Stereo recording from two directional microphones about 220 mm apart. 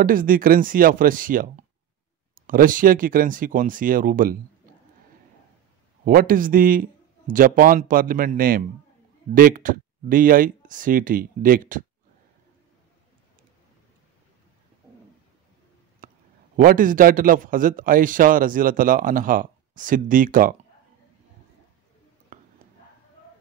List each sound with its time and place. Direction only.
0.0 s a man's voice: 40° right (ahead or behind)
6.0 s a man's voice: 40° right (ahead or behind)
14.8 s bird: 15° right (ahead or behind)
16.0 s a sound: 40° right (ahead or behind)
16.5 s a man's voice: 40° right (ahead or behind)
22.3 s whispering: 40° right (ahead or behind)